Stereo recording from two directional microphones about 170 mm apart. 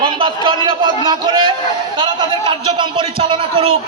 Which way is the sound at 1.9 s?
30° right (ahead or behind).